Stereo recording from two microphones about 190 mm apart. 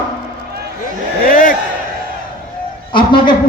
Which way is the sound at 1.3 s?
45° left (ahead or behind).